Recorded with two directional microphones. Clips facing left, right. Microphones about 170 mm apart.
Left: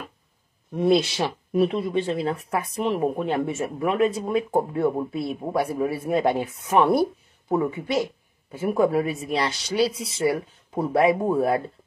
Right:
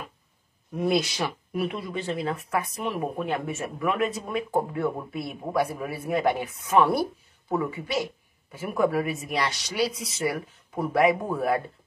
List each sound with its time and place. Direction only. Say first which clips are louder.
0.7 s speech: left 5 dB; 30° left (ahead or behind)